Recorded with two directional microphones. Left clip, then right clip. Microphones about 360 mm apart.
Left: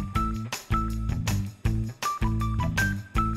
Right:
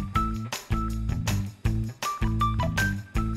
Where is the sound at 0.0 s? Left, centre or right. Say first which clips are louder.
Right 2 dB; centre.